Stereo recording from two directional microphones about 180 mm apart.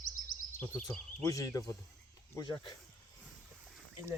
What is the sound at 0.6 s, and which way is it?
Speech, 10° left (ahead or behind).